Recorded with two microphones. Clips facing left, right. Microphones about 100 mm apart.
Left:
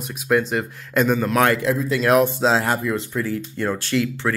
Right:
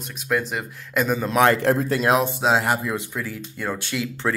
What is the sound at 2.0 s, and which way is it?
Speech, 20° right (ahead or behind).